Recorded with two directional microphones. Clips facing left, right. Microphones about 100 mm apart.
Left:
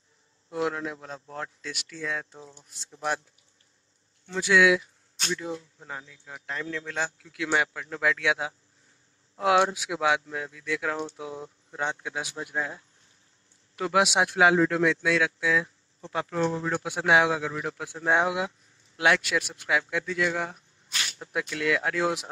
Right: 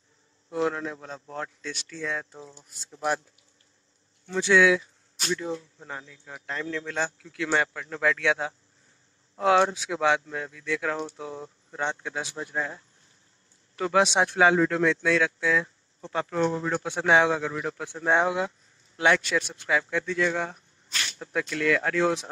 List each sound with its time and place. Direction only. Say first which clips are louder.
0.5 s a man's voice: right 2 dB; 10° left (ahead or behind); by 3.2 s 5° right (ahead or behind)
4.4 s a man's voice: right 1 dB; 10° left (ahead or behind)
5.2 s a man's voice: right 2 dB; 20° left (ahead or behind)